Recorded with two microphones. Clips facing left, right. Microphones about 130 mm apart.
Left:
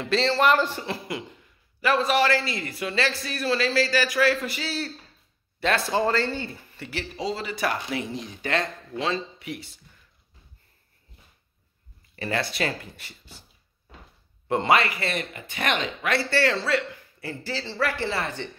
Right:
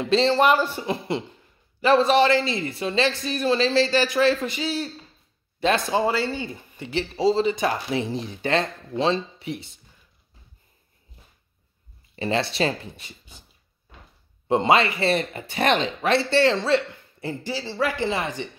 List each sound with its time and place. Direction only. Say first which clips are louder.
0.0 s speech: right 3 dB; 20° right (ahead or behind)
12.2 s speech: right 4 dB; 25° right (ahead or behind)
14.5 s speech: right 3 dB; 20° right (ahead or behind)